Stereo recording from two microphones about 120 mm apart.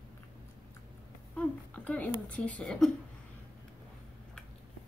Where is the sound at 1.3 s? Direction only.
10° left (ahead or behind).